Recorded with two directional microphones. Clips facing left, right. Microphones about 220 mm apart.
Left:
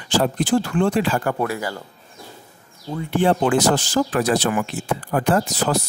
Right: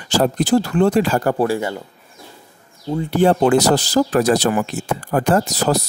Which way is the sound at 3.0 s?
40° right (ahead or behind).